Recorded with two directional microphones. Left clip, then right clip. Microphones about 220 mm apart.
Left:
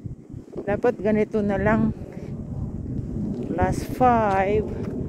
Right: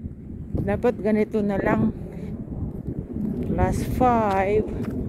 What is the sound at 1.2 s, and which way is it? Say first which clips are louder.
Speech: left 1 dB; 10° left (ahead or behind).